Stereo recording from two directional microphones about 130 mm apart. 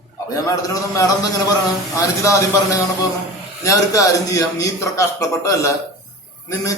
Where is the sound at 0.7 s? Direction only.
25° left (ahead or behind).